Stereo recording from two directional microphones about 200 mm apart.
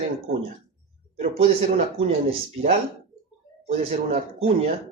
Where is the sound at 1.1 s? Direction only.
40° right (ahead or behind).